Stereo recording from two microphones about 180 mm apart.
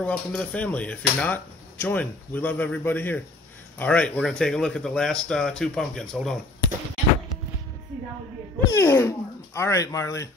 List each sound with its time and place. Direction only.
0.0 s speech: 5° left (ahead or behind)
8.6 s speech: 15° left (ahead or behind)